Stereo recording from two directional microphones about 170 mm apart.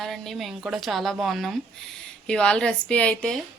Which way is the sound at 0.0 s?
Centre (ahead or behind).